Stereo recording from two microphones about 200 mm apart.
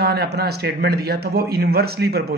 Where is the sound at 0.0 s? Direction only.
50° right (ahead or behind).